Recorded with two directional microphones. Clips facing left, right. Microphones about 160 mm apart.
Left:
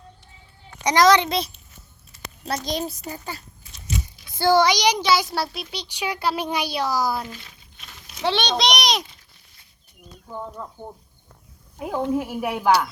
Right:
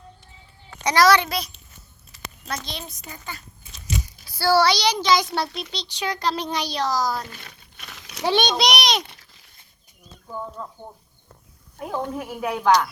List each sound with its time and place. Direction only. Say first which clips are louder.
0.8 s a child's voice: left 1 dB; 15° left (ahead or behind)
2.4 s a child's voice: left 7 dB; 40° left (ahead or behind)
4.3 s a child's voice: left 1 dB; 20° left (ahead or behind)
7.4 s crumpling: right 4 dB; 80° right
8.2 s a child's voice: right 1 dB; 15° right (ahead or behind)
9.0 s a sound: right 4 dB; 90° right
11.8 s a child's voice: left 4 dB; 10° left (ahead or behind)